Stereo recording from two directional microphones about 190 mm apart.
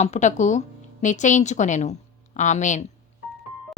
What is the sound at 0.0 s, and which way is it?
A woman's voice, 40° left (ahead or behind).